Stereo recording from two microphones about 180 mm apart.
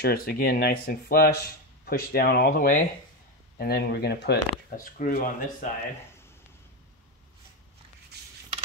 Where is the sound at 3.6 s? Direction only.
65° left (ahead or behind).